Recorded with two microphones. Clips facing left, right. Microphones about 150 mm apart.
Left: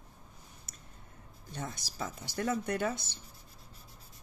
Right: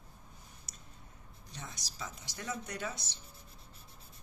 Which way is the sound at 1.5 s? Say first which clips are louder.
Left 8 dB; 55° left (ahead or behind).